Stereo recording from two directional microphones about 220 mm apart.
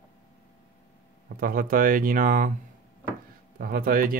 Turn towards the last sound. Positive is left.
turn(degrees=-40)  # may be behind; listen again after turning